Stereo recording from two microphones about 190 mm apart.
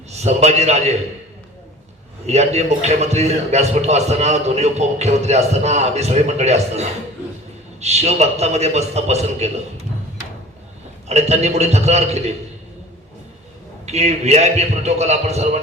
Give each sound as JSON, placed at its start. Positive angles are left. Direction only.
{"t": 0.1, "sound": "a man's voice", "side_deg": -35}
{"t": 2.2, "sound": "a man's voice", "side_deg": -35}
{"t": 11.1, "sound": "a man's voice", "side_deg": -35}
{"t": 13.8, "sound": "a man's voice", "side_deg": -35}